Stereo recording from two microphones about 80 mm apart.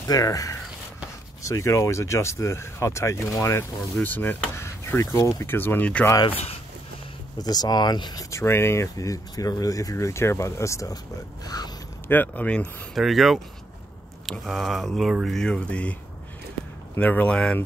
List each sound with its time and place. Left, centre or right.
0.0 s speech: left
3.9 s speech: left
5.6 s speech: left
7.3 s speech: left
8.3 s speech: left
11.4 s a sound: left
12.1 s speech: left
12.9 s speech: centre
14.4 s speech: centre
17.0 s speech: centre